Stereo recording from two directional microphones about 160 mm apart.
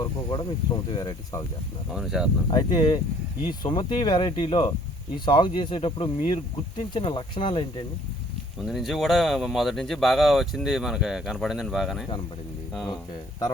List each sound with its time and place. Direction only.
0.0 s speech: 30° left (ahead or behind)
1.9 s speech: centre (ahead or behind)
2.5 s speech: 25° left (ahead or behind)
8.6 s speech: centre (ahead or behind)